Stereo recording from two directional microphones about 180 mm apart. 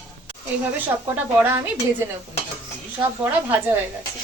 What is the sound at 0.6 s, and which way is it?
Speech, 10° right (ahead or behind).